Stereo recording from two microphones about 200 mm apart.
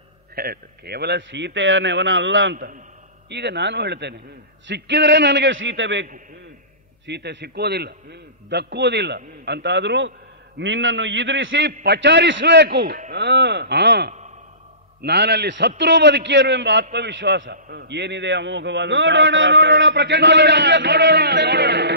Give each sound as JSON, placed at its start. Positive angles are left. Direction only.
{"t": 0.4, "sound": "a man's voice", "side_deg": -50}
{"t": 7.1, "sound": "a man's voice", "side_deg": -60}